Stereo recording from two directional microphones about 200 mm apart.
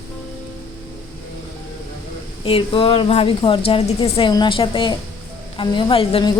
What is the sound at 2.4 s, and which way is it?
A woman's voice, 25° left (ahead or behind).